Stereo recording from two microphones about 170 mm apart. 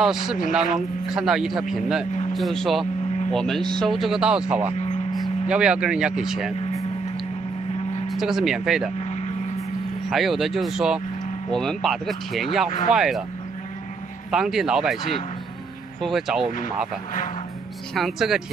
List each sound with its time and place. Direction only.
0.0 s speech: 5° right (ahead or behind)
4.7 s a sound: 40° left (ahead or behind)
5.5 s speech: 5° right (ahead or behind)
8.1 s speech: centre (ahead or behind)
9.0 s vehicle: 40° left (ahead or behind)
10.0 s speech: centre (ahead or behind)
14.3 s speech: centre (ahead or behind)
16.0 s speech: centre (ahead or behind)
17.9 s speech: centre (ahead or behind)